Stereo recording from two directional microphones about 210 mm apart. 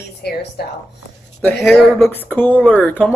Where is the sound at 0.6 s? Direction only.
50° left (ahead or behind).